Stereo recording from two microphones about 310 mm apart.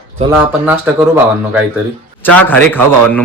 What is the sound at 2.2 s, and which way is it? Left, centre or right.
Speech, centre.